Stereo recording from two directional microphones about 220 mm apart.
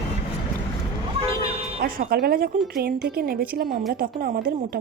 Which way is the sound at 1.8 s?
45° right (ahead or behind).